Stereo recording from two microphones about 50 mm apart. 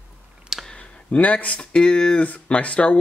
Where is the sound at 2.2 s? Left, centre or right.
Left.